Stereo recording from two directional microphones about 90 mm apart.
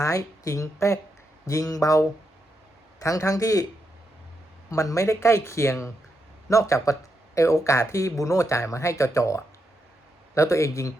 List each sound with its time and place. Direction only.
0.0 s speech: 35° left (ahead or behind)
4.7 s speech: 35° left (ahead or behind)